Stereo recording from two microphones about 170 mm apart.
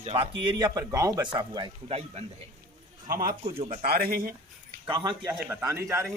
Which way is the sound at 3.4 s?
35° right (ahead or behind).